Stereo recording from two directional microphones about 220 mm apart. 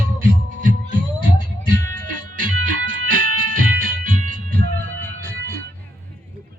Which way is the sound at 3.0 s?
40° right (ahead or behind).